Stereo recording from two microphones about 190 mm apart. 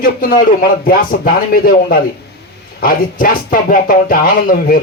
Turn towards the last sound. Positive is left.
turn(degrees=50)  # may be behind; listen again after turning